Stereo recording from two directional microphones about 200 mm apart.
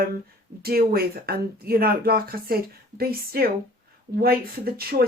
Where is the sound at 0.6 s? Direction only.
50° right (ahead or behind).